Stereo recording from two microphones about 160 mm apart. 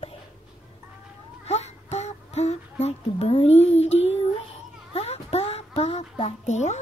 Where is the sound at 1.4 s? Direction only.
40° left (ahead or behind).